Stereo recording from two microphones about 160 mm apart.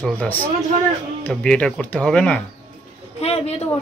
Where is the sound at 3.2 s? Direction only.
40° left (ahead or behind).